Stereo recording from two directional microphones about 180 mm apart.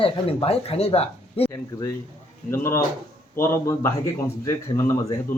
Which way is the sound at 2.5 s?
15° left (ahead or behind).